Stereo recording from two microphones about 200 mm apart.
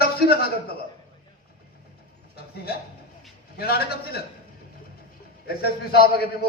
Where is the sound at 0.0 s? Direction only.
50° left (ahead or behind).